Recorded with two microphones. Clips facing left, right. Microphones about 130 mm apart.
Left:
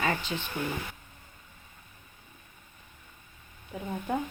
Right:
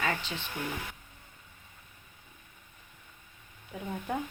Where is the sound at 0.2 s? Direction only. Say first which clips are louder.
Left 4 dB; 5° left (ahead or behind).